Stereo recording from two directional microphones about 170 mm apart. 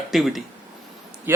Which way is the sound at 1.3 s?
10° right (ahead or behind).